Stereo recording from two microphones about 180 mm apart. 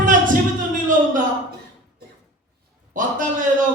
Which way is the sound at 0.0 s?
50° right (ahead or behind).